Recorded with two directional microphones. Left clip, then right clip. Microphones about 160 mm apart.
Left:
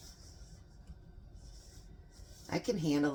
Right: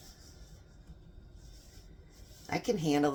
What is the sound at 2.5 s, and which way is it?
Speech, 45° right (ahead or behind).